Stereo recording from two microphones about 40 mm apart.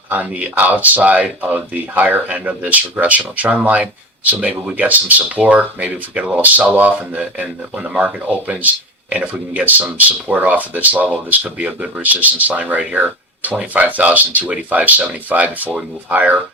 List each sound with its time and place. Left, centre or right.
0.1 s speech: right